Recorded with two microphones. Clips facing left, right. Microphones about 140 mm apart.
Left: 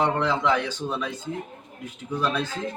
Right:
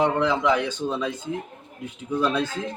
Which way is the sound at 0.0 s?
15° right (ahead or behind).